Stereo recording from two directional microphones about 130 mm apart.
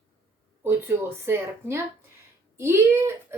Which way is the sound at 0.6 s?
20° right (ahead or behind).